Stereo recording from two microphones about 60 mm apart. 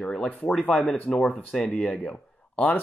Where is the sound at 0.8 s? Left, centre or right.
Centre.